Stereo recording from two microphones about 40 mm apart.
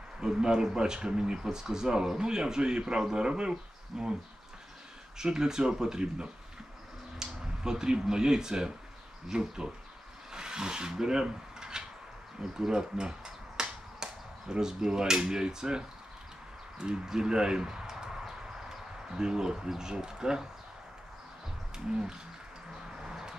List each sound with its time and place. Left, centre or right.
0.2 s speech: centre
5.1 s speech: centre
16.7 s a sound: centre
19.7 s speech: centre
21.7 s speech: centre
23.0 s a sound: centre